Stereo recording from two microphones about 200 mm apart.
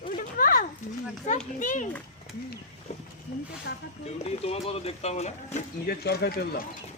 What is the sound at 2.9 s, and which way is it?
Speech, 35° left (ahead or behind).